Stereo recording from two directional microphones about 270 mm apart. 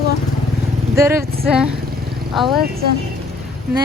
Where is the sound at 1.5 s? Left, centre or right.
Centre.